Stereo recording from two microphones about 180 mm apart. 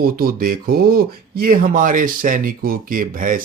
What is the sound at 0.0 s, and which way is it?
Speech, 55° right (ahead or behind).